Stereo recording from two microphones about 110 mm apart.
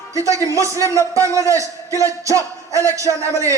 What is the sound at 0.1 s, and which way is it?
A man's voice, 30° right (ahead or behind).